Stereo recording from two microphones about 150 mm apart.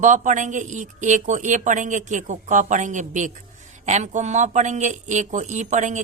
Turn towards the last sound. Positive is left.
turn(degrees=-55)  # may be behind; listen again after turning